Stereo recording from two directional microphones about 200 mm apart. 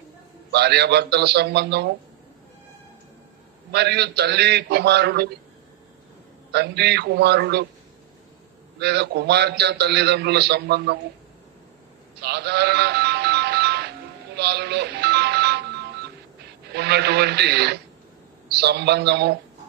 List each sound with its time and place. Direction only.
0.5 s a man's voice: 55° right (ahead or behind)
3.7 s a man's voice: 55° right (ahead or behind)
6.5 s a man's voice: 55° right (ahead or behind)
8.7 s a man's voice: 55° right (ahead or behind)
12.2 s music: 55° right (ahead or behind)
16.7 s a man's voice: 55° right (ahead or behind)